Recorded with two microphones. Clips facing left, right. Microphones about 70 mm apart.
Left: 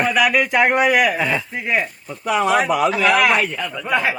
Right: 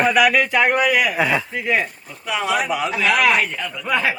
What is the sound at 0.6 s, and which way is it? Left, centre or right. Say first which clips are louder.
Speech: left 4 dB; left.